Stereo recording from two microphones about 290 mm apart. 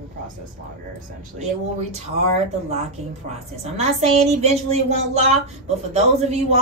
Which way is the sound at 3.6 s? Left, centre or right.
Right.